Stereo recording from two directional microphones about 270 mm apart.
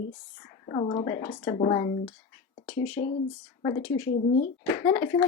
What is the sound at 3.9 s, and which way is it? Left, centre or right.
Speech, left.